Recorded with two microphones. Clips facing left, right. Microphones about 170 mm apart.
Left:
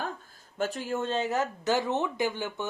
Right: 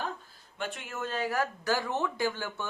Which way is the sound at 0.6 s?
35° left (ahead or behind).